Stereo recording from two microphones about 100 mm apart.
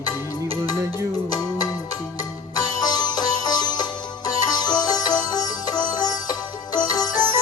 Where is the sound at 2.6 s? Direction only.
40° left (ahead or behind).